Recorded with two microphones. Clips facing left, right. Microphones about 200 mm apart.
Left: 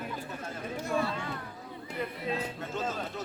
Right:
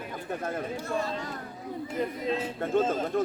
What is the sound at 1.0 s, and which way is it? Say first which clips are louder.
Speech: right 1 dB; 40° right (ahead or behind).